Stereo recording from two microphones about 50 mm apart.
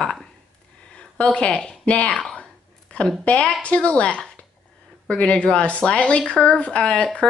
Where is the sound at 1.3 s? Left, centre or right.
Left.